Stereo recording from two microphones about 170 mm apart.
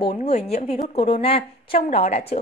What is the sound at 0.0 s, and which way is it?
A woman's voice, 35° left (ahead or behind).